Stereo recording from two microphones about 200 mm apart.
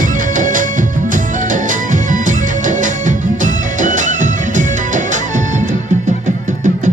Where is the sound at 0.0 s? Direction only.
40° right (ahead or behind).